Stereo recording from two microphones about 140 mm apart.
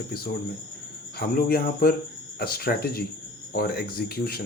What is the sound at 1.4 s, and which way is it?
Speech, 90° left.